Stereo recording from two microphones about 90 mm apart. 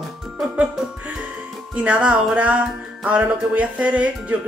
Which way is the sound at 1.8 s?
15° right (ahead or behind).